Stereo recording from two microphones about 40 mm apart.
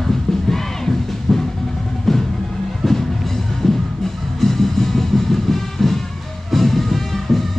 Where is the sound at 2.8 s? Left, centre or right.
Centre.